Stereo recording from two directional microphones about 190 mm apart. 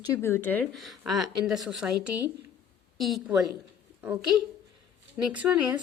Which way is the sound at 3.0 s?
Centre (ahead or behind).